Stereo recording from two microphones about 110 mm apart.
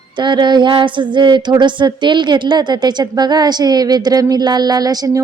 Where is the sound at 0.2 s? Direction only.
45° right (ahead or behind).